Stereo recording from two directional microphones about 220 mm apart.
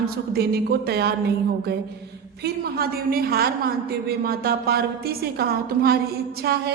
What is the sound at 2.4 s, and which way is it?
A woman's voice, 45° right (ahead or behind).